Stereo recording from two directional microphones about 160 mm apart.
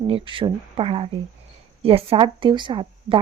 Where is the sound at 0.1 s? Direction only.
35° right (ahead or behind).